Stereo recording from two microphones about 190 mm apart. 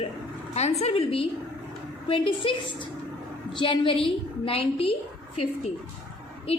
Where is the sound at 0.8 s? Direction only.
30° left (ahead or behind).